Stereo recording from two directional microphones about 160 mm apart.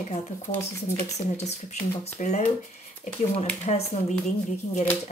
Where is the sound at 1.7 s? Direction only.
45° left (ahead or behind).